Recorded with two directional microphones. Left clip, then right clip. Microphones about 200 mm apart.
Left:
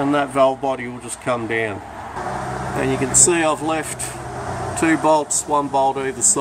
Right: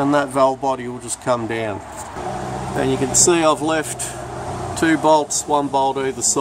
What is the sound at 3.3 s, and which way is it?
Speech, 20° right (ahead or behind).